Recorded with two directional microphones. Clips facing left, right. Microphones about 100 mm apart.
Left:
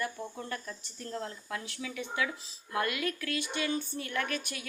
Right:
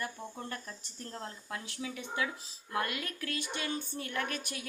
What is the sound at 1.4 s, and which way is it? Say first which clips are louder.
Speech: left 1 dB; 30° right (ahead or behind).